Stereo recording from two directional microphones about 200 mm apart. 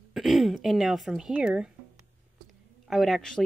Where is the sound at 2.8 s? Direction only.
Centre (ahead or behind).